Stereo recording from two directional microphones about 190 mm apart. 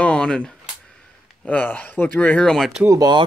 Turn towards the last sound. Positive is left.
turn(degrees=-20)  # may be behind; listen again after turning